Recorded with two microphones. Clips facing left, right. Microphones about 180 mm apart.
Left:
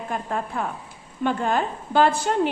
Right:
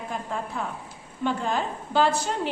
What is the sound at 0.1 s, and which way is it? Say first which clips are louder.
A woman's voice: left 4 dB; 55° left (ahead or behind).